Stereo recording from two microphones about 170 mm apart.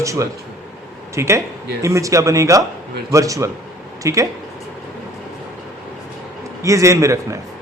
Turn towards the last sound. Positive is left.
turn(degrees=-20)  # may be behind; listen again after turning